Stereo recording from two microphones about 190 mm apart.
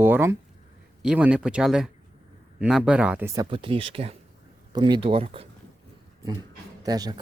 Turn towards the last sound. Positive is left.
turn(degrees=-20)  # may be behind; listen again after turning